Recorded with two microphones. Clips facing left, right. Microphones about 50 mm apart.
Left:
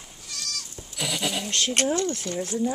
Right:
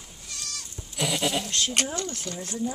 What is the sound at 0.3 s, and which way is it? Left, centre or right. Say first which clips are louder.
Goat: left 3 dB; right.